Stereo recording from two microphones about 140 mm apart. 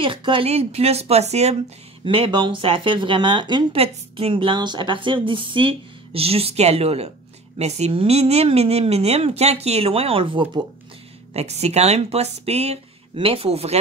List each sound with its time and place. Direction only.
0.0 s speech: 35° right (ahead or behind)
2.0 s speech: 40° right (ahead or behind)
11.3 s speech: 50° right (ahead or behind)